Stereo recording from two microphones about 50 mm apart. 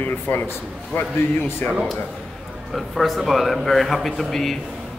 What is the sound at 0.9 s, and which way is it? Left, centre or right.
Speech, left.